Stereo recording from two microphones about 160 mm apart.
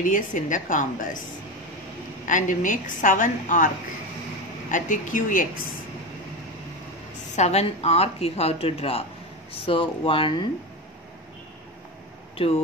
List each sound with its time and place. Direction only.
0.0 s a woman's voice: 55° left (ahead or behind)
2.2 s a woman's voice: 55° left (ahead or behind)
7.3 s a woman's voice: 40° left (ahead or behind)